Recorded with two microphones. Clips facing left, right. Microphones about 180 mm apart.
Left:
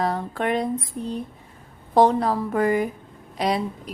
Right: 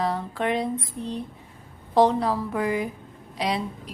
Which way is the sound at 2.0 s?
50° left (ahead or behind).